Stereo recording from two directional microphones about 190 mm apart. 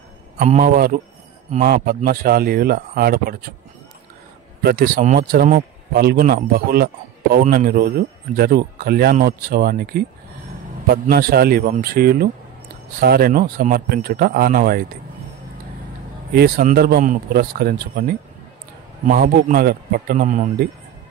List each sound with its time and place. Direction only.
0.4 s speech: 45° right (ahead or behind)
4.6 s speech: 50° right (ahead or behind)
16.3 s speech: 55° right (ahead or behind)